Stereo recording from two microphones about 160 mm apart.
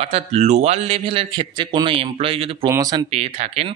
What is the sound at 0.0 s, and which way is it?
Speech, 40° right (ahead or behind).